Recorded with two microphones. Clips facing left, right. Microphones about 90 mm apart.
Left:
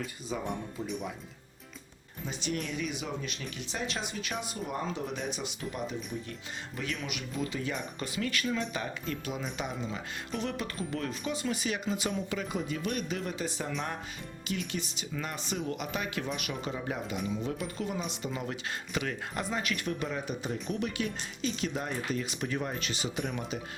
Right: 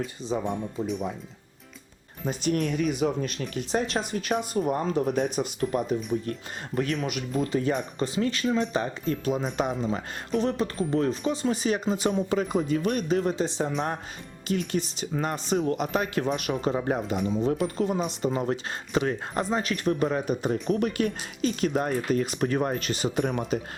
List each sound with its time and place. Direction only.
0.3 s speech: 20° right (ahead or behind)
2.2 s speech: 50° right (ahead or behind)
7.9 s speech: 30° right (ahead or behind)